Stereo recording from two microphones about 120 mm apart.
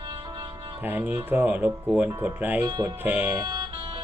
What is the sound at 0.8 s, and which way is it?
Speech, 15° right (ahead or behind).